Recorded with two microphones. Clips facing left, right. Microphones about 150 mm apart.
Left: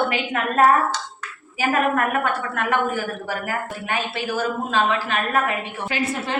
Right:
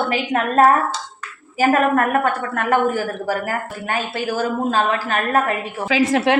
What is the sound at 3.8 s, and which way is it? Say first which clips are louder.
A woman's voice: right 4 dB; 40° right (ahead or behind).